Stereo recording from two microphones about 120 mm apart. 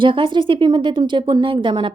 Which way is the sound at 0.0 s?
45° right (ahead or behind).